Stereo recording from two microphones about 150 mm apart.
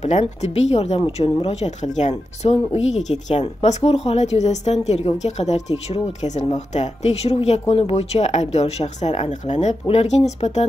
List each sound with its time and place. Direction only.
0.0 s a woman's voice: 50° left (ahead or behind)